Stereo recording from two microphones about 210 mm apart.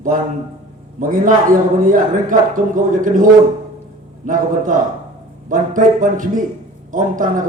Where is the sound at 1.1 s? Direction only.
40° right (ahead or behind).